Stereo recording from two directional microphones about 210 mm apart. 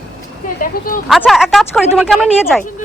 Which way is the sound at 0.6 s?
40° left (ahead or behind).